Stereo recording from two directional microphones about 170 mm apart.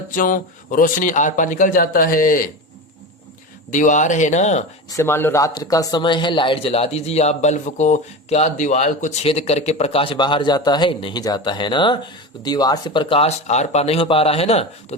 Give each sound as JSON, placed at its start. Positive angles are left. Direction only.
{"t": 0.1, "sound": "speech", "side_deg": 50}
{"t": 3.7, "sound": "speech", "side_deg": 50}
{"t": 4.9, "sound": "speech", "side_deg": 15}